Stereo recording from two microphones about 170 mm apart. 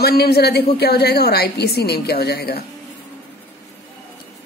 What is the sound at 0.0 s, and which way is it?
A woman's voice, 65° left (ahead or behind).